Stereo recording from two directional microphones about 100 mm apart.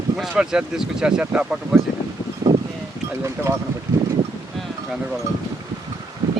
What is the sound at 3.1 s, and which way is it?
Speech, 30° right (ahead or behind).